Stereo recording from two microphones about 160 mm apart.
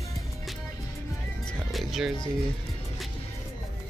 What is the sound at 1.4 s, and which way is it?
Music, centre (ahead or behind).